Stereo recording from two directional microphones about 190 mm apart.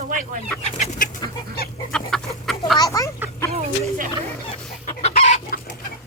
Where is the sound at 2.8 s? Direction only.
15° left (ahead or behind).